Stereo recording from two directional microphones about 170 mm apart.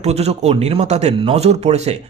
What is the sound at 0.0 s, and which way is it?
Speech, 40° right (ahead or behind).